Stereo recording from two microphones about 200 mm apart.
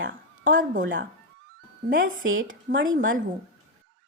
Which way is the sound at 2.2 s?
75° right (ahead or behind).